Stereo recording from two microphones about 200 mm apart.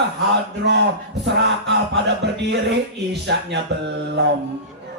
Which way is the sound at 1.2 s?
60° right (ahead or behind).